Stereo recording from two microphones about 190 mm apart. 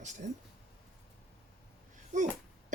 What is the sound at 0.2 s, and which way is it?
Speech, 40° right (ahead or behind).